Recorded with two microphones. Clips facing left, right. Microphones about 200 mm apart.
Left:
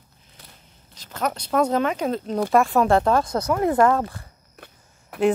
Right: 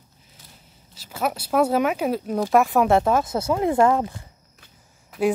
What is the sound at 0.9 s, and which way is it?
Speech, 5° right (ahead or behind).